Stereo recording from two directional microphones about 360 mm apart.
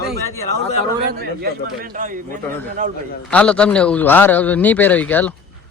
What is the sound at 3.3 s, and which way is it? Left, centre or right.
A man's voice, centre.